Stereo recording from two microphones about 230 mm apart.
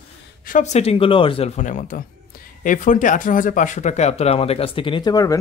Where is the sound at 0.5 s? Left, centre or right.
Left.